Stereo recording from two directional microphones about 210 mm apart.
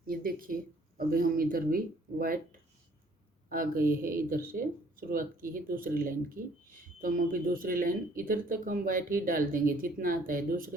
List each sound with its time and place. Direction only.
0.1 s speech: 45° right (ahead or behind)
3.5 s speech: 45° right (ahead or behind)